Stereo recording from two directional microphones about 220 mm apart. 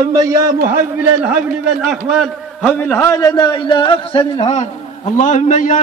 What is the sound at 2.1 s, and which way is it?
A man's voice, 5° left (ahead or behind).